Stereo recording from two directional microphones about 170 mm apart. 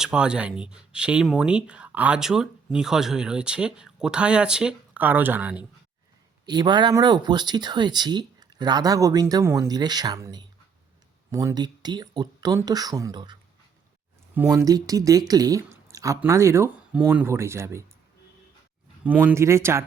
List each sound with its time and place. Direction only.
0.0 s speech: 5° right (ahead or behind)
6.4 s speech: 25° right (ahead or behind)
14.5 s speech: 20° right (ahead or behind)
19.0 s speech: 10° right (ahead or behind)